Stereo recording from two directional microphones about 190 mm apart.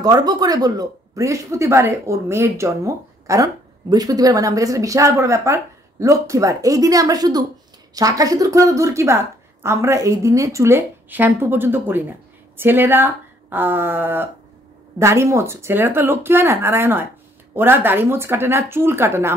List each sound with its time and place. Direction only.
0.0 s a woman's voice: 20° right (ahead or behind)